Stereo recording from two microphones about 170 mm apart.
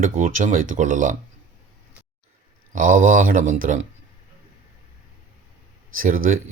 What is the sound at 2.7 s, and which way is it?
Speech, 50° right (ahead or behind).